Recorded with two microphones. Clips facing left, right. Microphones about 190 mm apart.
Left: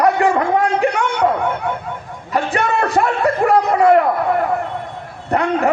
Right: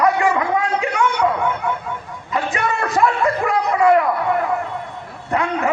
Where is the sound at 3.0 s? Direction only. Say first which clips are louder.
Even; 50° left (ahead or behind).